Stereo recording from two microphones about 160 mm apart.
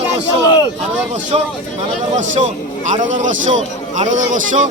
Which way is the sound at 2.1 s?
50° right (ahead or behind).